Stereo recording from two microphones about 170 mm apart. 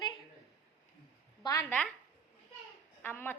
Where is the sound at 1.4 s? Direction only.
25° left (ahead or behind).